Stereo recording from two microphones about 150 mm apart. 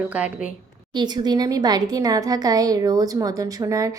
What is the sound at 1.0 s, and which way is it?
Speech, 30° right (ahead or behind).